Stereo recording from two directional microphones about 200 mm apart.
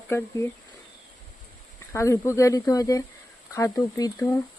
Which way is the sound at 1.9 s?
15° left (ahead or behind).